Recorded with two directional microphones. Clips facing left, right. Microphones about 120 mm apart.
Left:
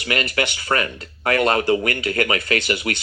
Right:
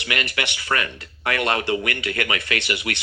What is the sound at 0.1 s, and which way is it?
A man's voice, 35° left (ahead or behind).